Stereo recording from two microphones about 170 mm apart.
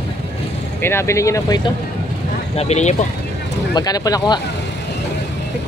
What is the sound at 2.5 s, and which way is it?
Speech, 40° left (ahead or behind).